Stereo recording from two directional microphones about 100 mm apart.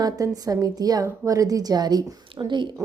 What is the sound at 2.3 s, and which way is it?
Speech, 50° right (ahead or behind).